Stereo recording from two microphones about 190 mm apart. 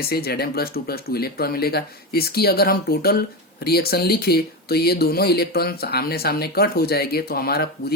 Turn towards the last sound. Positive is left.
turn(degrees=55)  # may be behind; listen again after turning